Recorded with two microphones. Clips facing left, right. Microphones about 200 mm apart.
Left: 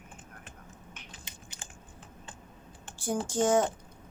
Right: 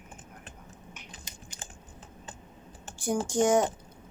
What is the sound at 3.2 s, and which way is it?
Speech, 15° right (ahead or behind).